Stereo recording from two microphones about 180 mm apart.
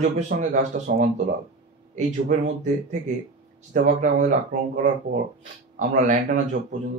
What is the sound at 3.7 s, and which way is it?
A man's voice, 45° right (ahead or behind).